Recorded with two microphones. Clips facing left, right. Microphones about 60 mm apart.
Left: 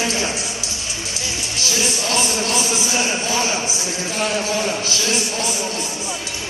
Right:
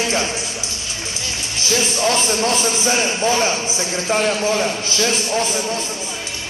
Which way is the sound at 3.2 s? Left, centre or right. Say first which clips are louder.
Right 4 dB; right.